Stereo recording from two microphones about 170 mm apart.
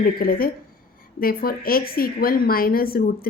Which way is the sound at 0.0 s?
60° left (ahead or behind).